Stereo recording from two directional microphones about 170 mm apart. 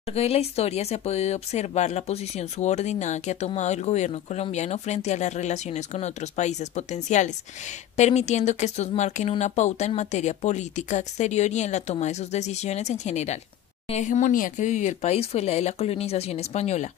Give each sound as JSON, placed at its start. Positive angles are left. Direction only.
{"t": 0.1, "sound": "speech", "side_deg": 35}